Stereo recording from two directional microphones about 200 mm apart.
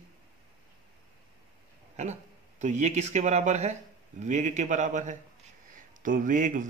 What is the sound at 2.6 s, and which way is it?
Speech, 35° right (ahead or behind).